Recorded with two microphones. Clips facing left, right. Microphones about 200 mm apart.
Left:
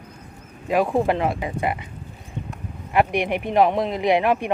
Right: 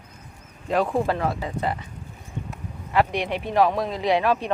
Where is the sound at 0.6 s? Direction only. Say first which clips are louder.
Left 3 dB; 10° left (ahead or behind).